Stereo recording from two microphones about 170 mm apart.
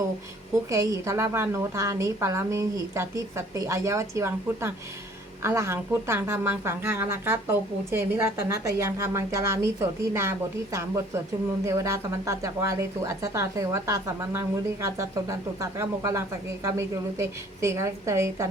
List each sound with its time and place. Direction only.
0.7 s speech: 20° right (ahead or behind)